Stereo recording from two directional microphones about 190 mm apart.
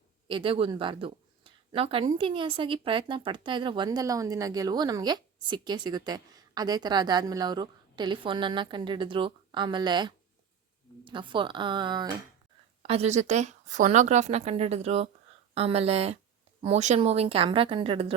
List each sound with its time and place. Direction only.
0.3 s a woman's voice: 25° right (ahead or behind)